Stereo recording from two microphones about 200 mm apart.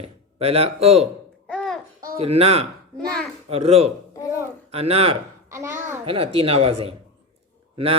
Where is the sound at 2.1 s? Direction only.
30° right (ahead or behind).